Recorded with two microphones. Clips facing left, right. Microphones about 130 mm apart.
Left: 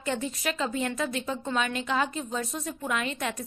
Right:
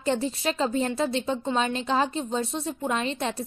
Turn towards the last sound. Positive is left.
turn(degrees=-30)  # may be behind; listen again after turning